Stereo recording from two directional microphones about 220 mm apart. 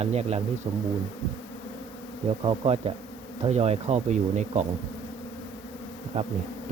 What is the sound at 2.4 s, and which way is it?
Speech, 25° right (ahead or behind).